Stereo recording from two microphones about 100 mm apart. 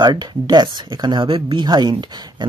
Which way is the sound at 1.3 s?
65° right (ahead or behind).